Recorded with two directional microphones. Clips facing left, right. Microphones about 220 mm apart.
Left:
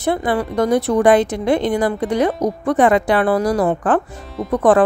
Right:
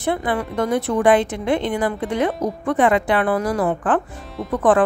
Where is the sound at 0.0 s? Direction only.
40° left (ahead or behind).